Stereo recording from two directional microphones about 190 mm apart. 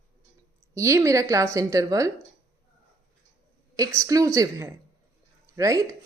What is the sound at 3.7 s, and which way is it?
A woman's voice, 15° right (ahead or behind).